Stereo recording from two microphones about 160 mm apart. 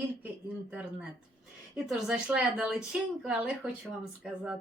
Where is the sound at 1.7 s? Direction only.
Centre (ahead or behind).